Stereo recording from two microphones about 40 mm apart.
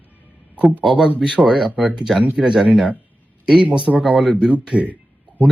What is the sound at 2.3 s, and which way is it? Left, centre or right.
Speech, centre.